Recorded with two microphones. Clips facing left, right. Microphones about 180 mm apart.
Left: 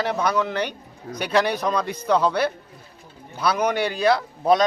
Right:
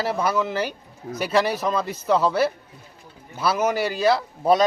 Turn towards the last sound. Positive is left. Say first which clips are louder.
# even
turn(degrees=-5)  # may be behind; listen again after turning